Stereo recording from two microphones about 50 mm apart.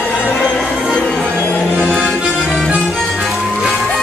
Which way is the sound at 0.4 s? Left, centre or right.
Centre.